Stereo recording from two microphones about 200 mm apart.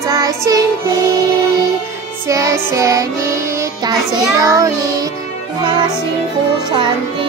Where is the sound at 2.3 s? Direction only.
15° right (ahead or behind).